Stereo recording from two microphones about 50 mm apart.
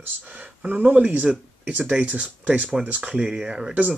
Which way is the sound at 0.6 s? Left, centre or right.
Right.